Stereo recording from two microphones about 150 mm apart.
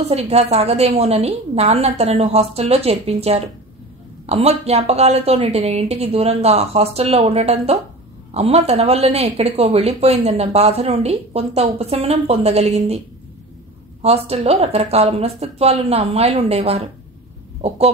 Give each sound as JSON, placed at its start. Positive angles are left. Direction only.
{"t": 0.0, "sound": "a woman's voice", "side_deg": -45}
{"t": 14.0, "sound": "a woman's voice", "side_deg": -40}